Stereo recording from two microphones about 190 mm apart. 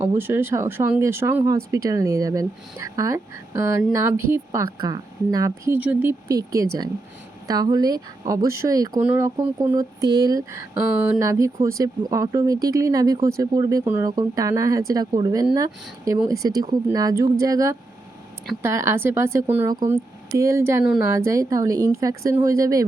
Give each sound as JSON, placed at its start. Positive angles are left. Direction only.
{"t": 0.2, "sound": "speech", "side_deg": -10}